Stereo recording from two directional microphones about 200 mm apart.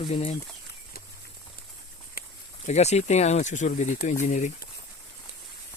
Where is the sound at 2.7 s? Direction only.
35° left (ahead or behind).